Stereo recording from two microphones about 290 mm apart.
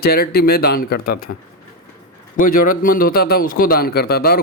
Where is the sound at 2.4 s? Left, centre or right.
Left.